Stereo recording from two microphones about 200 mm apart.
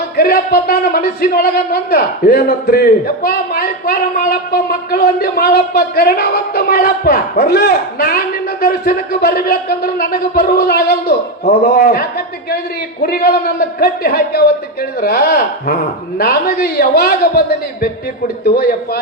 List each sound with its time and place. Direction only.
0.2 s a man's voice: 50° left (ahead or behind)